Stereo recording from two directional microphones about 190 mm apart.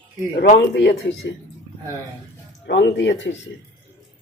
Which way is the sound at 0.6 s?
70° left (ahead or behind).